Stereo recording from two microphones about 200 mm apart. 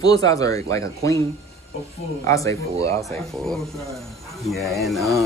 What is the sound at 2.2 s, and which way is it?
Speech, 15° left (ahead or behind).